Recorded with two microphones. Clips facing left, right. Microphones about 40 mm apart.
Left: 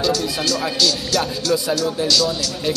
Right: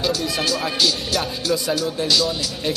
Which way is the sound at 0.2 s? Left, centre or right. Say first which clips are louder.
Left 1 dB; centre.